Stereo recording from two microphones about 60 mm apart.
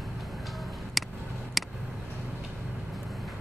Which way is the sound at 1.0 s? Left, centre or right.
Centre.